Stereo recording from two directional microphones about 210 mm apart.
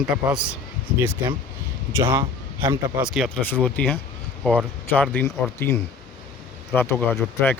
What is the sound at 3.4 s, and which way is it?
Speech, 10° left (ahead or behind).